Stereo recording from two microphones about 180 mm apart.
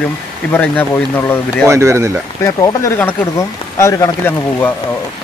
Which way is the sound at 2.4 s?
15° left (ahead or behind).